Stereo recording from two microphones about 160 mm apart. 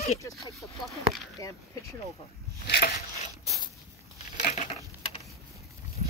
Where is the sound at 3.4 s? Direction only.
20° right (ahead or behind).